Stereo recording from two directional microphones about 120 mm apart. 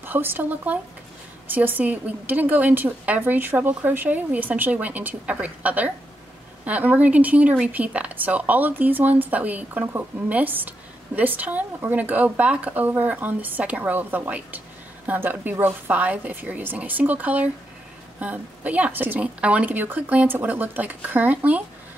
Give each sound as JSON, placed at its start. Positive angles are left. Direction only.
{"t": 0.0, "sound": "a woman's voice", "side_deg": -15}